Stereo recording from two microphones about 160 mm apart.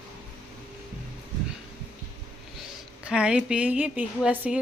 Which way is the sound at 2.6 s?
5° right (ahead or behind).